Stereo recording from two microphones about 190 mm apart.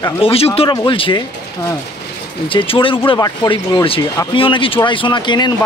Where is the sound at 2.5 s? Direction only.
30° left (ahead or behind).